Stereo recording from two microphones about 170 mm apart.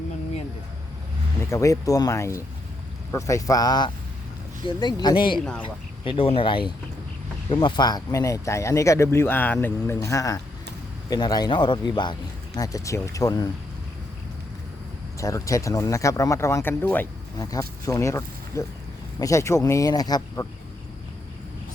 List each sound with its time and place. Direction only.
1.4 s speech: 15° left (ahead or behind)
15.2 s speech: 20° left (ahead or behind)
17.3 s speech: 20° left (ahead or behind)